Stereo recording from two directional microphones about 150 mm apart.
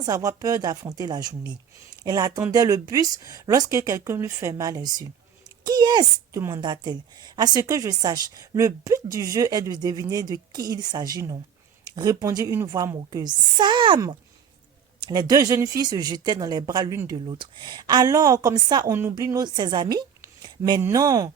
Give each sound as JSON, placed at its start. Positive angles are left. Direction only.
{"t": 0.0, "sound": "a woman's voice", "side_deg": -25}
{"t": 15.0, "sound": "a woman's voice", "side_deg": -25}